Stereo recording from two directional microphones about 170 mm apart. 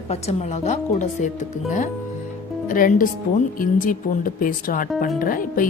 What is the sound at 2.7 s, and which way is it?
Speech, 55° left (ahead or behind).